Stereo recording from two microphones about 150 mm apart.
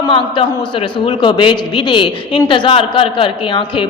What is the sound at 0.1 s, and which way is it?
A man's voice, 35° left (ahead or behind).